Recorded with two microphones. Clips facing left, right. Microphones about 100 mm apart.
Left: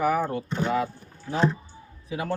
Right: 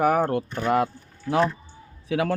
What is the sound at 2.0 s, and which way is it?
Speech, 90° right.